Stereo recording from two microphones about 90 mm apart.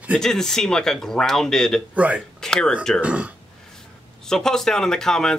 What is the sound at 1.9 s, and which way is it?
Speech, 15° right (ahead or behind).